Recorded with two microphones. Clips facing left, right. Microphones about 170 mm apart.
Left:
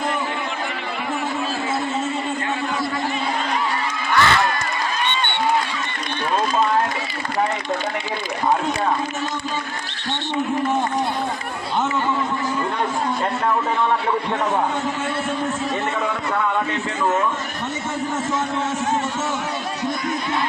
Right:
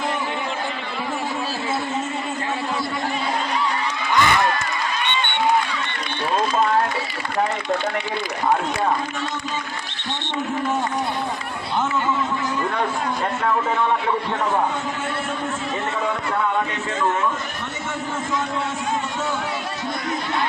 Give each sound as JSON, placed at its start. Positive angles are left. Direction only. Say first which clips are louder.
{"t": 4.1, "sound": "crowd", "louder": "left 1 dB", "side_deg": -15}